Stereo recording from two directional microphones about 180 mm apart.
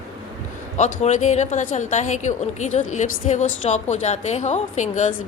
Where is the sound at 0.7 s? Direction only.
40° left (ahead or behind).